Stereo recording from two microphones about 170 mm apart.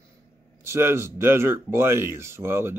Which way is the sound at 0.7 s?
15° right (ahead or behind).